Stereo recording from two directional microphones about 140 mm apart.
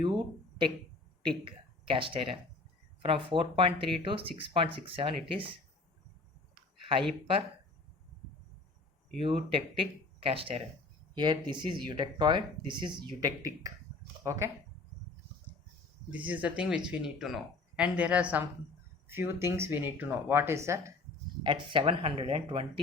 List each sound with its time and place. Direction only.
0.0 s a sound: 35° right (ahead or behind)
1.5 s speech: 40° right (ahead or behind)
9.2 s speech: 40° right (ahead or behind); by 14.5 s 20° right (ahead or behind)
16.0 s speech: 10° right (ahead or behind)
21.4 s speech: 35° right (ahead or behind)